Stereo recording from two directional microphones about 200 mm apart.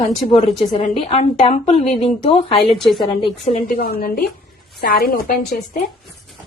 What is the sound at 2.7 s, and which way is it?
Speech, centre (ahead or behind).